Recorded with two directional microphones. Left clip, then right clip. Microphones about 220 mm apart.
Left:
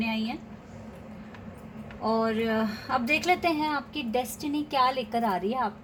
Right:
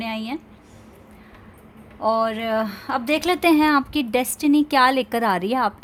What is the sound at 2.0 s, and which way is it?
A woman's voice, 45° right (ahead or behind).